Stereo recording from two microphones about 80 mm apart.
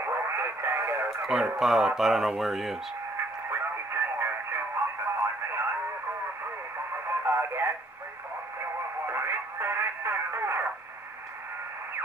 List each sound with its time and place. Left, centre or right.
0.0 s radio: right
1.2 s speech: centre
3.4 s radio: right
7.1 s radio: right
9.0 s radio: right